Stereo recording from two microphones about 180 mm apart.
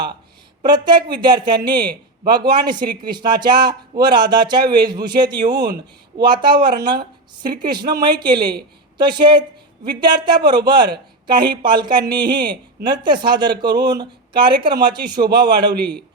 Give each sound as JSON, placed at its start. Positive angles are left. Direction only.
{"t": 0.6, "sound": "a man's voice", "side_deg": -25}